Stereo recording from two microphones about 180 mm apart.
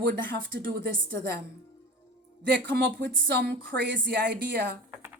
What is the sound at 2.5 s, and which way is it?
Speech, 65° right (ahead or behind).